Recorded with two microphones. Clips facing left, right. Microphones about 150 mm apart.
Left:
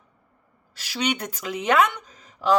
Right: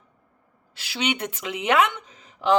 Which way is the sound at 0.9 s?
25° right (ahead or behind).